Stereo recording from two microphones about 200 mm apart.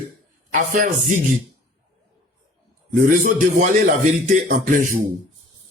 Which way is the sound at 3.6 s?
40° right (ahead or behind).